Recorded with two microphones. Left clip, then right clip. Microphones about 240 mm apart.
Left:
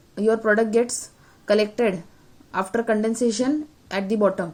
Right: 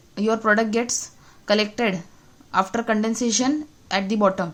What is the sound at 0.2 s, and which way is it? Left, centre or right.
Speech, right.